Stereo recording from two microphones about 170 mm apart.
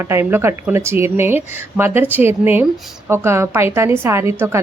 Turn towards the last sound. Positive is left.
turn(degrees=-15)  # may be behind; listen again after turning